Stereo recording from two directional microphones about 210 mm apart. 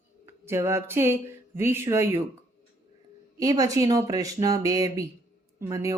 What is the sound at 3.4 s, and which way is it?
Speech, 15° right (ahead or behind).